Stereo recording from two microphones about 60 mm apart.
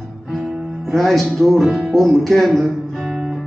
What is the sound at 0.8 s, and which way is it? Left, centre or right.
Music, centre.